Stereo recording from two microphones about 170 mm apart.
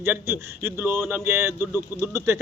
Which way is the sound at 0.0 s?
15° right (ahead or behind).